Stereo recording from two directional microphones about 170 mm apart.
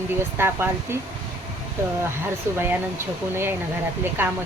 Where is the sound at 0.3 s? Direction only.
15° right (ahead or behind).